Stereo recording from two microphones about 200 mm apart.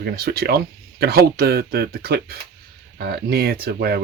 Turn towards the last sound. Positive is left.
turn(degrees=-50)  # may be behind; listen again after turning